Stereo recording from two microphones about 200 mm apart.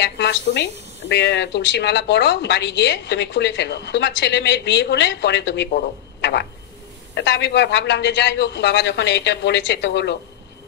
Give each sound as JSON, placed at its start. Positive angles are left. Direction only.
{"t": 0.0, "sound": "a woman's voice", "side_deg": 60}